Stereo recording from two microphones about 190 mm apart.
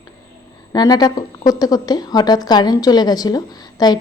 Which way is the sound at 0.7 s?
20° left (ahead or behind).